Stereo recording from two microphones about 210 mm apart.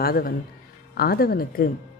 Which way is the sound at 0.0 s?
45° left (ahead or behind).